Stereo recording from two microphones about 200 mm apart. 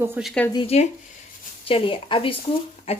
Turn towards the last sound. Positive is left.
turn(degrees=30)  # may be behind; listen again after turning